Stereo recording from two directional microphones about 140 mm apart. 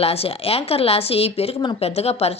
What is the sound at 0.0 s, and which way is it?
A woman's voice, 45° left (ahead or behind).